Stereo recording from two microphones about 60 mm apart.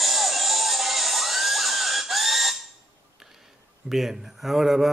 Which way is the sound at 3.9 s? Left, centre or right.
Centre.